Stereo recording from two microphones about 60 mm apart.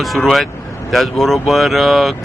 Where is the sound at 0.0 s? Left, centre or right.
Centre.